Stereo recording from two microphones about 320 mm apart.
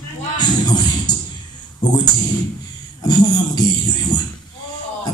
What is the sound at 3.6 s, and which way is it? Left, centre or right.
Speech, centre.